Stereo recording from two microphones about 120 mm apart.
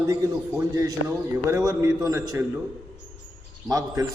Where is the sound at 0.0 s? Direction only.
25° right (ahead or behind).